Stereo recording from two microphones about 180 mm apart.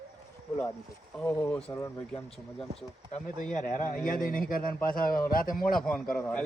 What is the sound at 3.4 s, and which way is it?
A man's voice, 45° left (ahead or behind).